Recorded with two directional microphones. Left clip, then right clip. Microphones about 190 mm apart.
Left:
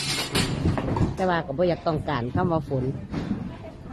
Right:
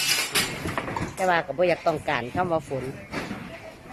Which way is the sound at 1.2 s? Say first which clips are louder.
Right 2 dB; 10° right (ahead or behind).